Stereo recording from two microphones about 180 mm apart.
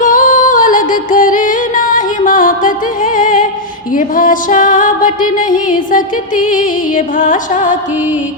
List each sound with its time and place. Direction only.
0.0 s music: 45° left (ahead or behind)